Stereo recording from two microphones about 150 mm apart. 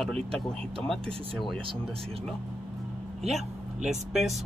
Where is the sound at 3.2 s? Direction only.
Centre (ahead or behind).